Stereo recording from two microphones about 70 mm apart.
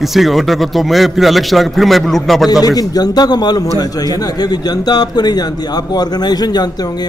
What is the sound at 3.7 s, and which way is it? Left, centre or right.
A man's voice, left.